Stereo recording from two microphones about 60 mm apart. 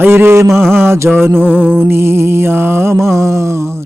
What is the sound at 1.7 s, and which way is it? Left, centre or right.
Mantra, right.